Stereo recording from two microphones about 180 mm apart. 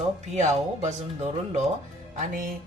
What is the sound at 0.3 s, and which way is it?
Speech, 40° right (ahead or behind).